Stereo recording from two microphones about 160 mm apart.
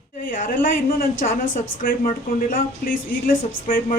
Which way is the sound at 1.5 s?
60° left (ahead or behind).